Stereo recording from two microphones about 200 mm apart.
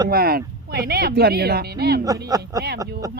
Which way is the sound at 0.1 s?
50° right (ahead or behind).